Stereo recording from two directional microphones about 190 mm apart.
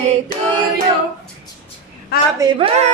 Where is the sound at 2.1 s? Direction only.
55° left (ahead or behind).